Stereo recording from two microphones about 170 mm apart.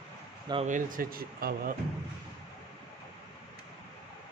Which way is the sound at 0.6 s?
50° right (ahead or behind).